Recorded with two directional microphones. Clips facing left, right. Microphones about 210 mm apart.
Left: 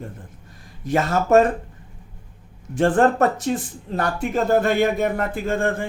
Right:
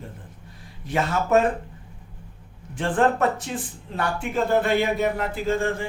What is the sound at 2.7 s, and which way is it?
A man's voice, 45° left (ahead or behind).